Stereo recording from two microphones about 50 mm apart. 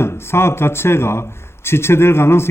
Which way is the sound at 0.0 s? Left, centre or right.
Left.